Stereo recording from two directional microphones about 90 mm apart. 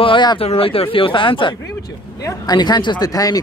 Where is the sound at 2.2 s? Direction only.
50° left (ahead or behind).